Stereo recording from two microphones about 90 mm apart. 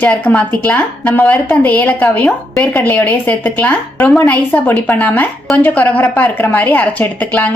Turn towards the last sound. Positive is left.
turn(degrees=20)  # may be behind; listen again after turning